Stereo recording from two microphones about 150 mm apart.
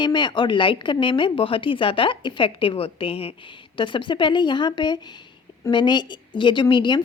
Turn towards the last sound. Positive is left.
turn(degrees=30)  # may be behind; listen again after turning